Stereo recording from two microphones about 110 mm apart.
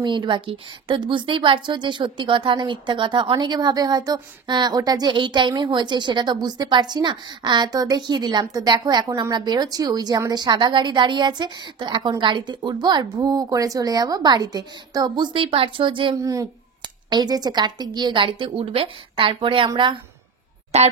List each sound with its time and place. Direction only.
0.0 s a woman's voice: 45° right (ahead or behind)
16.2 s a woman's voice: 30° right (ahead or behind); by 19.7 s 50° right (ahead or behind)
20.7 s speech: 80° right